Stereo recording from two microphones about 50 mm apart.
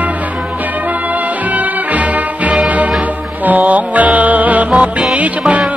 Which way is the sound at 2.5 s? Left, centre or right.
Right.